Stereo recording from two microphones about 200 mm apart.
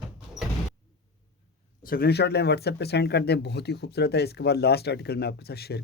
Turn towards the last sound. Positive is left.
turn(degrees=50)  # may be behind; listen again after turning